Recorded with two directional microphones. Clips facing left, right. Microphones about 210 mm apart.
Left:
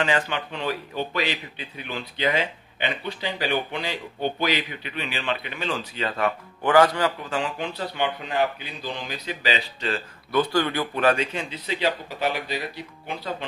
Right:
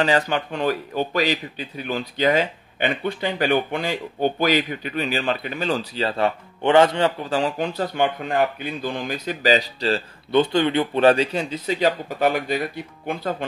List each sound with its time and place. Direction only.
0.0 s a man's voice: 40° right (ahead or behind)